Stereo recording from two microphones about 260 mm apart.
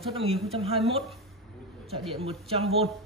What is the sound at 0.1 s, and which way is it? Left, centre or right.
Speech, right.